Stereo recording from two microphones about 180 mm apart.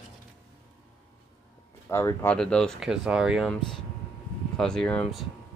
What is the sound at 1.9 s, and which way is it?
Speech, 15° left (ahead or behind).